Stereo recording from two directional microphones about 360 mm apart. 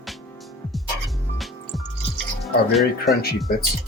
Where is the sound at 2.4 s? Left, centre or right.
Centre.